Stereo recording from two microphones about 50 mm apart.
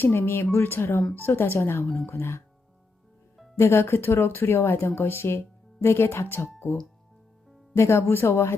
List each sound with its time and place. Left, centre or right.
0.0 s speech: left
3.6 s speech: left
6.2 s speech: left
7.8 s speech: left